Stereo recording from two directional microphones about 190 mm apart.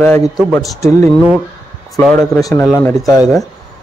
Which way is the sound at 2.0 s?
Centre (ahead or behind).